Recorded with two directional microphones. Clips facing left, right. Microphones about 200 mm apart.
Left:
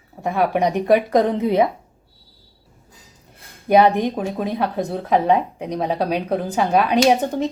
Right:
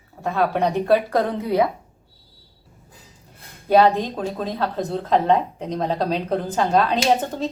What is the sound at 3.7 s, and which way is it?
A woman's voice, 15° left (ahead or behind).